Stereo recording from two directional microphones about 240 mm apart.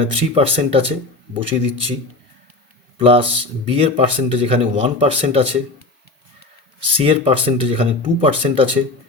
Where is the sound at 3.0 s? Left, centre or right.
Right.